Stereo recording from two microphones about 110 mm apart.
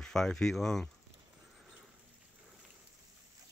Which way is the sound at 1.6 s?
5° right (ahead or behind).